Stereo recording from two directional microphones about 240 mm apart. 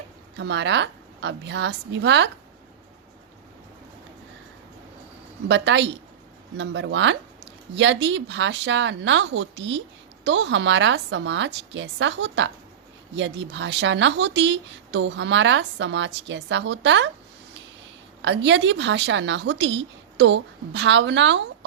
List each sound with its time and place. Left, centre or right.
0.3 s speech: right
5.5 s speech: right
18.2 s speech: right